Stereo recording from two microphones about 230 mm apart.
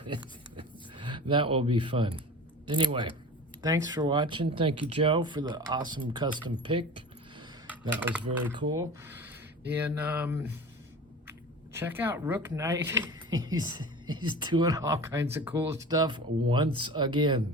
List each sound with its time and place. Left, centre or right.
0.0 s a sound: right
2.6 s speech: right
7.7 s speech: centre